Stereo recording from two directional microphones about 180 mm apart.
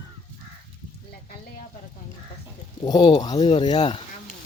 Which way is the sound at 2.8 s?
25° left (ahead or behind).